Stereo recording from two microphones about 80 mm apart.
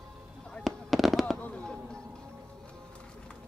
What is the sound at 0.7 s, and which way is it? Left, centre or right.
Fireworks, centre.